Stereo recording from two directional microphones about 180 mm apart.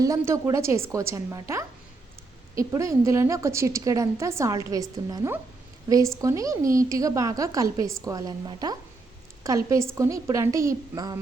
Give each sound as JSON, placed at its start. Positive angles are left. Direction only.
{"t": 0.0, "sound": "a woman's voice", "side_deg": -20}